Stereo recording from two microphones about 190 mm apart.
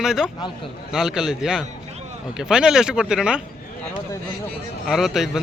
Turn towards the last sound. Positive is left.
turn(degrees=0)  # may be behind; listen again after turning